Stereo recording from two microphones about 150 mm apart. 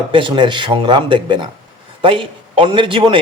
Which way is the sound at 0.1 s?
30° right (ahead or behind).